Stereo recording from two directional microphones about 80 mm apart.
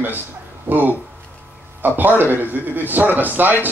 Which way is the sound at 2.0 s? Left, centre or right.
Right.